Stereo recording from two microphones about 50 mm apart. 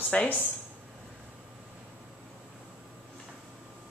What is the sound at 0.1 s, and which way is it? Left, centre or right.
Speech, left.